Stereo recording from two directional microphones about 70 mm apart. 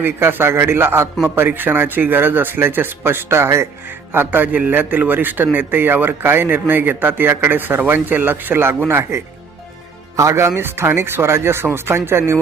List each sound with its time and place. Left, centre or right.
0.0 s a man's voice: right
4.1 s a man's voice: right